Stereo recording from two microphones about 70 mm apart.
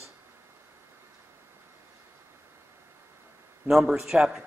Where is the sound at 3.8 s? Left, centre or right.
Centre.